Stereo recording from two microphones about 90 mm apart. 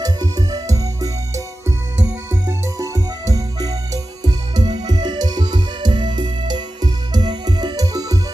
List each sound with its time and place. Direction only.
0.0 s music: 45° right (ahead or behind)
2.3 s music: 35° right (ahead or behind)